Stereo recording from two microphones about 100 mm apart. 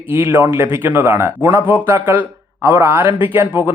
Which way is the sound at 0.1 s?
25° right (ahead or behind).